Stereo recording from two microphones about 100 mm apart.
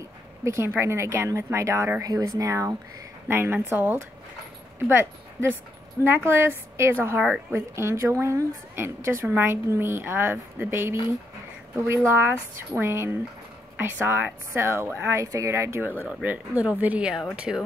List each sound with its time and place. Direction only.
0.5 s a woman's voice: 25° right (ahead or behind)
12.1 s a woman's voice: 20° right (ahead or behind)
16.1 s speech: 15° right (ahead or behind)